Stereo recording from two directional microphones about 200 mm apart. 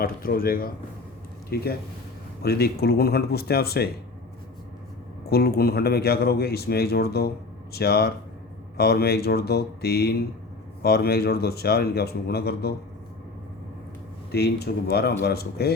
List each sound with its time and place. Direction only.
0.0 s a man's voice: 45° left (ahead or behind)
2.4 s a man's voice: 50° left (ahead or behind)
5.3 s a man's voice: 50° left (ahead or behind)
14.3 s a man's voice: 55° left (ahead or behind)